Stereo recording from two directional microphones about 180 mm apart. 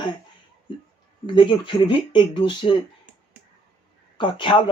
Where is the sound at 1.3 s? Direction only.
25° left (ahead or behind).